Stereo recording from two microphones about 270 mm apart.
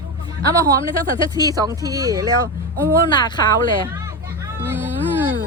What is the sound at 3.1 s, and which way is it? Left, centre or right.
Speech, centre.